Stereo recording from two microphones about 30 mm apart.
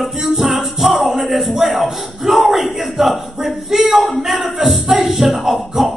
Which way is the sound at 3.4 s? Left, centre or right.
Centre.